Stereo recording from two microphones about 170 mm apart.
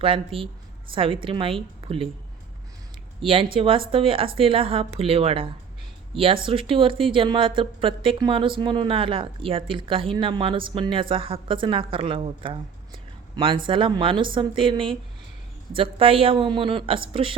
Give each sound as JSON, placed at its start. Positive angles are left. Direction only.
{"t": 0.0, "sound": "speech", "side_deg": -30}
{"t": 3.2, "sound": "a woman's voice", "side_deg": -30}